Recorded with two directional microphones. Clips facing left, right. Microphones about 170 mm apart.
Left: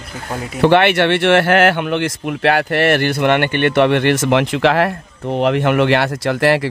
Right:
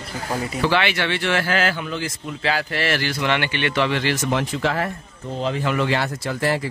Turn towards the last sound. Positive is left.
turn(degrees=75)  # may be behind; listen again after turning